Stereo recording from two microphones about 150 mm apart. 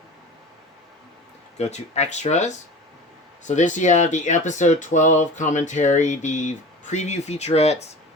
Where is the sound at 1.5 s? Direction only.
50° left (ahead or behind).